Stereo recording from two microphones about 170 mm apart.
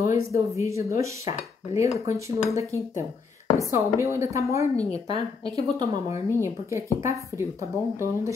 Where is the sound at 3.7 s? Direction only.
15° right (ahead or behind).